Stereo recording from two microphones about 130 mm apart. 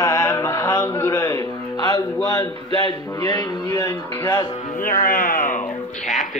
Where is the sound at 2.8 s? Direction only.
30° left (ahead or behind).